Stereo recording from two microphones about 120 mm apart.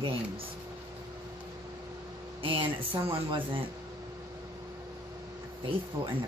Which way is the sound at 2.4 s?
45° right (ahead or behind).